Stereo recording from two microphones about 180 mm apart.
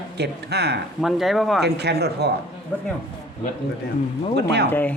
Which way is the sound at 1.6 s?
65° right (ahead or behind).